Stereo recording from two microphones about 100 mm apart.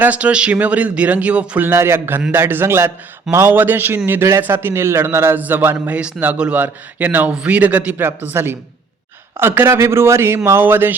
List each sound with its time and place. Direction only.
0.0 s a man's voice: 15° right (ahead or behind)